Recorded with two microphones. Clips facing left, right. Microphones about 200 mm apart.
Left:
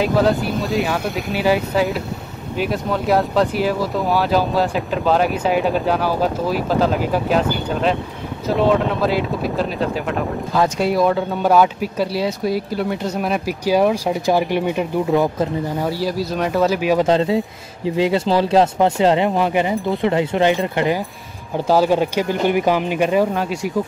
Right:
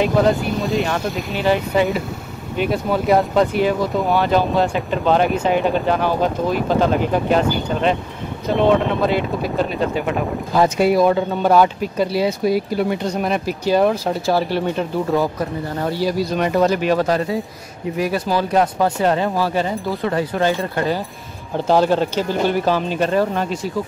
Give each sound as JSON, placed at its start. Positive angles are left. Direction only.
{"t": 0.0, "sound": "speech", "side_deg": 0}
{"t": 17.0, "sound": "speech", "side_deg": 20}